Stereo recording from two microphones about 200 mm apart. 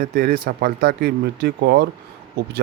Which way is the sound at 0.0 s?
55° right (ahead or behind).